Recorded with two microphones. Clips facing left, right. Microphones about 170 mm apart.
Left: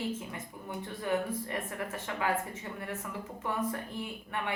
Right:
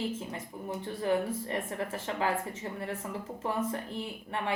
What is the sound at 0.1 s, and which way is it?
Speech, 30° right (ahead or behind).